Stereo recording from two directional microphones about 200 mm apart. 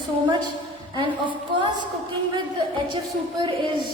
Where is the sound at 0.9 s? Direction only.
25° right (ahead or behind).